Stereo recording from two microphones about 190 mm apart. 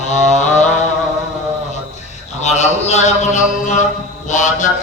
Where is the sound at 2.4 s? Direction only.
35° left (ahead or behind).